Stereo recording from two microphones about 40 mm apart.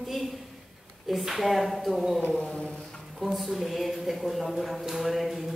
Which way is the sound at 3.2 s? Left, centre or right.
Centre.